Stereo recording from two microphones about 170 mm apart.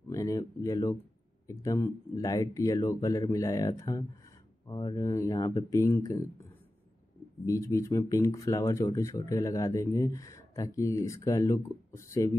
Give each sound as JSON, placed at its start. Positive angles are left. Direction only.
{"t": 0.1, "sound": "speech", "side_deg": 20}
{"t": 7.4, "sound": "speech", "side_deg": 20}